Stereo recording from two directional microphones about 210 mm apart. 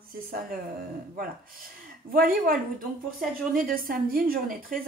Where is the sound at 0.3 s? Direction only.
40° right (ahead or behind).